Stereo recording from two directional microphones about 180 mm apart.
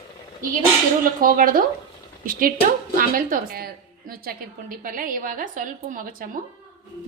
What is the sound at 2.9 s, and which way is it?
A woman's voice, 50° right (ahead or behind).